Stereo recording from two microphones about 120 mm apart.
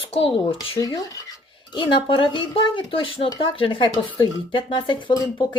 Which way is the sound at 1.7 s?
40° left (ahead or behind).